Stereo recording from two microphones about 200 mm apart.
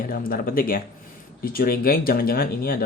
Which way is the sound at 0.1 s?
45° left (ahead or behind).